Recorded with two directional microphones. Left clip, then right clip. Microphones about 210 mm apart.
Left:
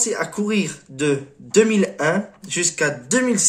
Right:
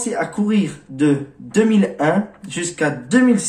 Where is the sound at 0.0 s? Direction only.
35° left (ahead or behind).